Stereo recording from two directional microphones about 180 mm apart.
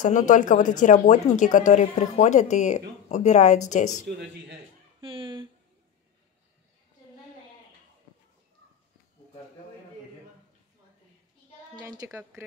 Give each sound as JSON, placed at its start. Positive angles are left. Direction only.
{"t": 0.0, "sound": "speech", "side_deg": 45}
{"t": 5.0, "sound": "a sound", "side_deg": -30}
{"t": 11.9, "sound": "speech", "side_deg": -20}